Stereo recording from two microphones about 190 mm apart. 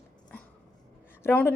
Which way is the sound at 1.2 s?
10° left (ahead or behind).